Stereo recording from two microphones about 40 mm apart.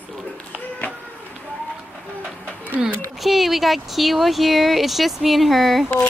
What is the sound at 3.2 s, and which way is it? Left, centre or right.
Speech, centre.